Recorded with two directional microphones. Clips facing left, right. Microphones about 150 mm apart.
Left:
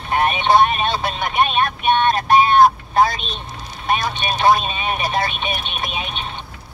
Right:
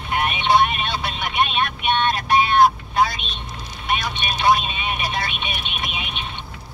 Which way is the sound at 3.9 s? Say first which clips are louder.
Left 4 dB; 40° left (ahead or behind).